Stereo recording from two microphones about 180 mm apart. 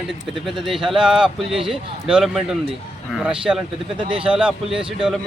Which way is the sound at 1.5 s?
30° right (ahead or behind).